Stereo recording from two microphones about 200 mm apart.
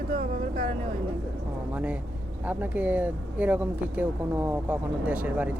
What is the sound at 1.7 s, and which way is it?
Speech, 5° right (ahead or behind).